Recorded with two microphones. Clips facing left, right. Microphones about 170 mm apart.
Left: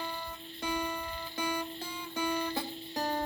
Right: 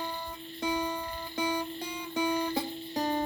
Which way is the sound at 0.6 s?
20° right (ahead or behind).